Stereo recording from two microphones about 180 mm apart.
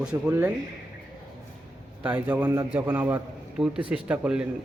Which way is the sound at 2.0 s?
10° right (ahead or behind).